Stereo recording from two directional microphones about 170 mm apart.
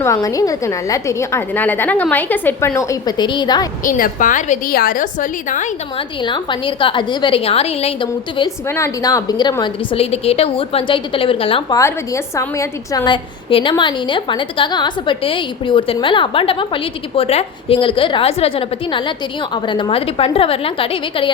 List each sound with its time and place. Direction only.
0.0 s a woman's voice: 20° left (ahead or behind)
3.8 s a woman's voice: 55° left (ahead or behind)
6.2 s a woman's voice: 25° left (ahead or behind)
8.7 s a woman's voice: 20° left (ahead or behind)
10.0 s a woman's voice: 35° left (ahead or behind)
11.8 s a woman's voice: 15° left (ahead or behind)
13.5 s a woman's voice: 30° left (ahead or behind)